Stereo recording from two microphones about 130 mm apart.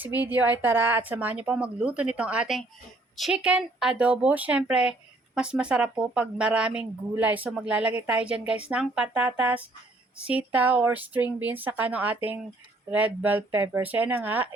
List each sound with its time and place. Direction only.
0.0 s speech: 15° right (ahead or behind)